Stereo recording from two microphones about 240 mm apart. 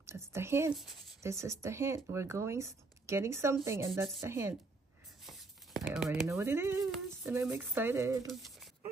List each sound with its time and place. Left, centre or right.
0.0 s a sound: centre
1.2 s speech: centre
5.2 s tearing: centre
6.2 s speech: centre
8.3 s speech: centre